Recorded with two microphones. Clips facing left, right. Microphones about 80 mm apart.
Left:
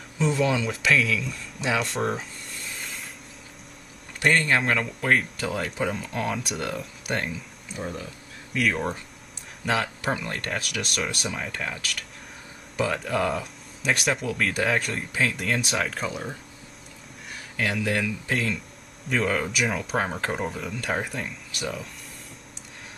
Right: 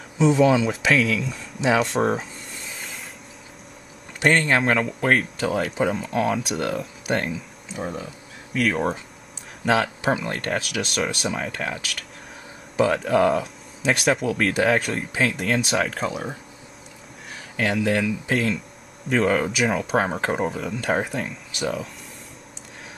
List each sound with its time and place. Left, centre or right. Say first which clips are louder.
0.3 s speech: right 7 dB; centre
1.0 s a sound: right 3 dB; centre
4.2 s speech: right 3 dB; centre
4.6 s speech: right 4 dB; centre
10.0 s speech: right 5 dB; centre
10.3 s speech: right 4 dB; centre
17.6 s speech: right 4 dB; centre
20.1 s speech: right 5 dB; centre
20.4 s speech: right 5 dB; centre